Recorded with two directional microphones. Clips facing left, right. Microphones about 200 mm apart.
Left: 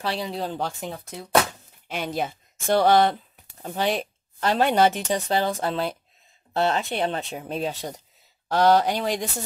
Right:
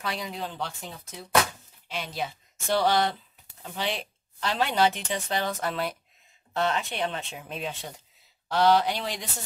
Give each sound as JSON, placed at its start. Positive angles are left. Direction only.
{"t": 0.0, "sound": "speech", "side_deg": 30}